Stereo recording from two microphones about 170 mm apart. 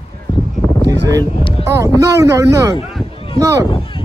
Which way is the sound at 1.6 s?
15° right (ahead or behind).